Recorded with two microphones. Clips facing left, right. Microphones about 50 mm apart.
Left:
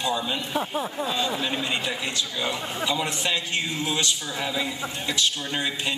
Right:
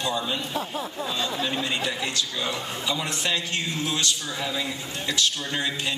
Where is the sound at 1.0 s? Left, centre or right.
Centre.